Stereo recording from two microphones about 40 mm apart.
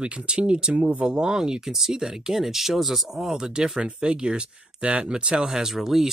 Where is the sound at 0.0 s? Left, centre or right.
Right.